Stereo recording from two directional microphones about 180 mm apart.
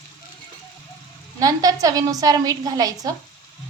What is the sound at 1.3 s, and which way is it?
A woman's voice, 20° right (ahead or behind).